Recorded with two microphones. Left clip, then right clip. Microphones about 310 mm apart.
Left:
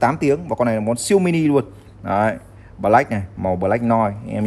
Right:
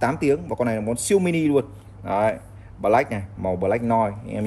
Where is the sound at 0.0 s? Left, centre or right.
Left.